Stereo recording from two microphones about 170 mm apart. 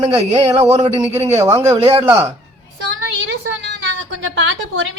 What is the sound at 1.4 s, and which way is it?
Speech, 15° right (ahead or behind).